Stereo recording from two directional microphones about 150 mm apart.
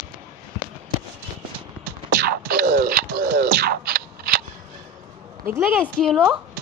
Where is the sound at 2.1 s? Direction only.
90° right.